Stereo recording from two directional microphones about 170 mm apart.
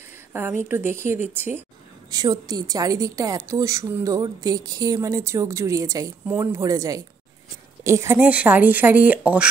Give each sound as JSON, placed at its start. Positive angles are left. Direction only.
{"t": 0.3, "sound": "speech", "side_deg": -15}